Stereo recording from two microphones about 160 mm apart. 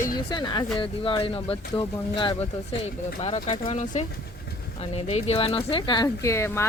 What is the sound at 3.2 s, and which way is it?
Speech, 45° left (ahead or behind).